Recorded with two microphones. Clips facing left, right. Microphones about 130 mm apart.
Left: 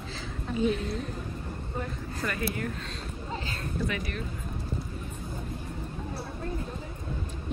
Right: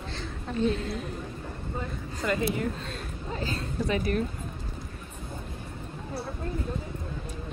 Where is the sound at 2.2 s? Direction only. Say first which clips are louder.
Right 5 dB; 20° right (ahead or behind).